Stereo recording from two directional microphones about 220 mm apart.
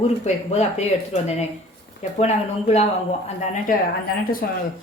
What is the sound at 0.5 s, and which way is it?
A woman's voice, 30° left (ahead or behind).